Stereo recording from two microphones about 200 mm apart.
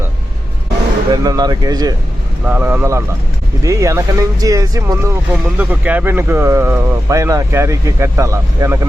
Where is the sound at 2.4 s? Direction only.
10° right (ahead or behind).